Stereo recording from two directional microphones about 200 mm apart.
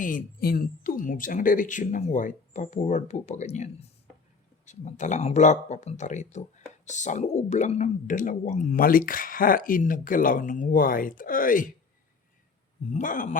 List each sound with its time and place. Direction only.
0.0 s speech: 40° left (ahead or behind)
12.9 s speech: 40° left (ahead or behind)